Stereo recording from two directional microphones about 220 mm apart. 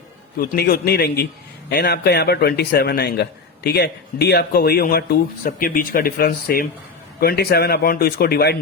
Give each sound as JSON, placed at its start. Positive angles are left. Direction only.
{"t": 0.3, "sound": "a man's voice", "side_deg": 45}